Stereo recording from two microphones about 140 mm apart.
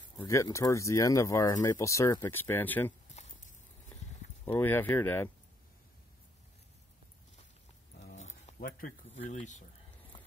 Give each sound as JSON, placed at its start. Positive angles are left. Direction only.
{"t": 0.2, "sound": "speech", "side_deg": 20}
{"t": 4.5, "sound": "speech", "side_deg": 15}
{"t": 8.5, "sound": "speech", "side_deg": 90}